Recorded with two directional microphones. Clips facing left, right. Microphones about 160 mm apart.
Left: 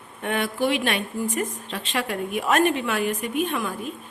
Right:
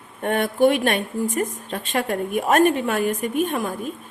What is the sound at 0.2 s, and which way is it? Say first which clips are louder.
A woman's voice: right 6 dB; 50° right (ahead or behind).